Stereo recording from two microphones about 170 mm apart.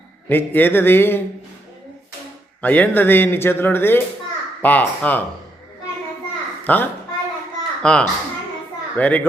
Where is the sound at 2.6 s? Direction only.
10° left (ahead or behind).